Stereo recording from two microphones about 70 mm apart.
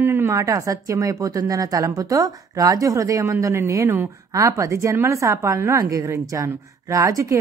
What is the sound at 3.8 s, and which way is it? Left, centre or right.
Speech, right.